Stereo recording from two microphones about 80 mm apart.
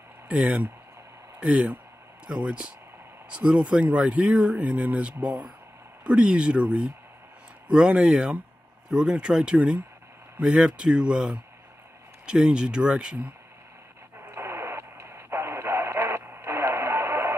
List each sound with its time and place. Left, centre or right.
0.3 s speech: centre
14.3 s radio: right